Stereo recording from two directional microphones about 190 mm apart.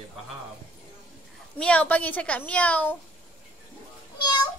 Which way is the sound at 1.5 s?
5° left (ahead or behind).